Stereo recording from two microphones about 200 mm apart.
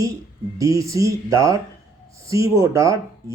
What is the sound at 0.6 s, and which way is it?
Speech, 15° right (ahead or behind).